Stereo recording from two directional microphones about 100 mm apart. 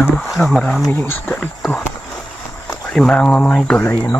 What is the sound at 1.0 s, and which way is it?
Speech, 20° left (ahead or behind).